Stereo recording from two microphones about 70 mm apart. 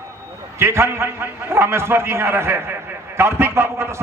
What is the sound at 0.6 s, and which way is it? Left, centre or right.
A man's voice, right.